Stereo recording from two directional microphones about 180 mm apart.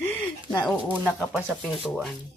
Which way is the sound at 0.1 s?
10° left (ahead or behind).